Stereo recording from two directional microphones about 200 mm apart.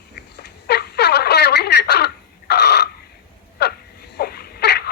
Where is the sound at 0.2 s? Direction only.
55° left (ahead or behind).